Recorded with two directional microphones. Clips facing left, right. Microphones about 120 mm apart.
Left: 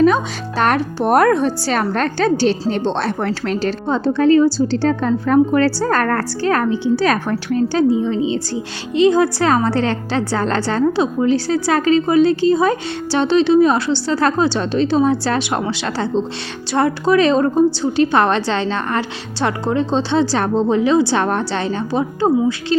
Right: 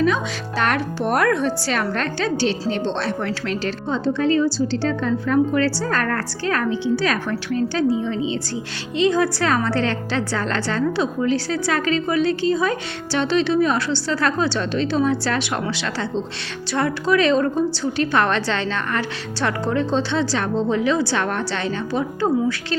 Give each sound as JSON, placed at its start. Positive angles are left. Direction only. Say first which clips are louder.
{"t": 0.0, "sound": "a woman's voice", "louder": "left 6 dB", "side_deg": 40}